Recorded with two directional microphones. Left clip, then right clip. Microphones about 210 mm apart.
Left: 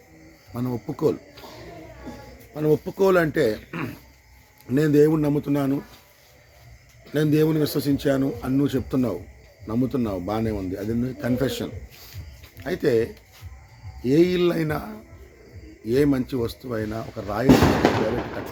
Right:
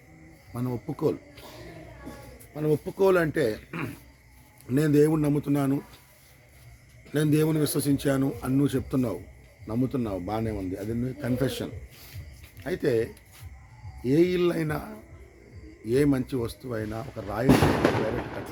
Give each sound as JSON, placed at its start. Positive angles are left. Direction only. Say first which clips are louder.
{"t": 0.5, "sound": "a man's voice", "louder": "left 4 dB", "side_deg": -10}
{"t": 2.6, "sound": "a man's voice", "louder": "left 4 dB", "side_deg": -5}
{"t": 7.1, "sound": "a man's voice", "louder": "left 4 dB", "side_deg": -15}